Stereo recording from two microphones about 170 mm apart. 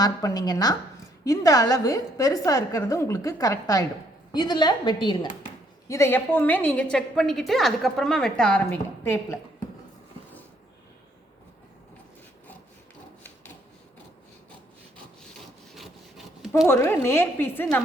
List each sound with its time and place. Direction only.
0.0 s a woman's voice: 20° left (ahead or behind)
5.9 s a woman's voice: 15° left (ahead or behind)
15.7 s rub: centre (ahead or behind)
16.6 s a woman's voice: 15° left (ahead or behind)